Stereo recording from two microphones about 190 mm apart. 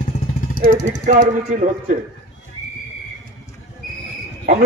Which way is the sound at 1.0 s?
40° right (ahead or behind).